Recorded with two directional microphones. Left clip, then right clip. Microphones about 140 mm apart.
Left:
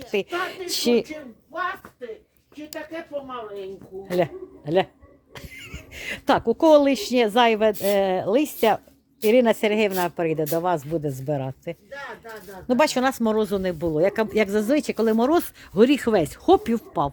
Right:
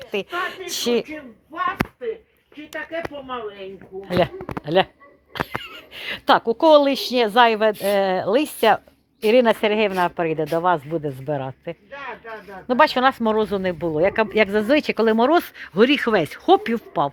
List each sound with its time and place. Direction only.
0.0 s a woman's voice: 35° left (ahead or behind)
4.2 s speech: 15° left (ahead or behind)